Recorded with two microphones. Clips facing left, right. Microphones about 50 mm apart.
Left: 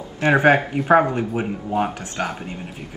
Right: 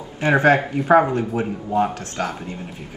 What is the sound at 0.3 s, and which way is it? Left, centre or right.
Speech, centre.